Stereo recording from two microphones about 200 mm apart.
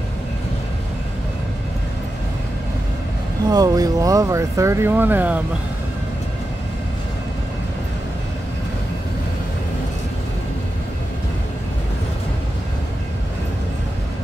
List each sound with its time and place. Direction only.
3.4 s speech: 20° right (ahead or behind)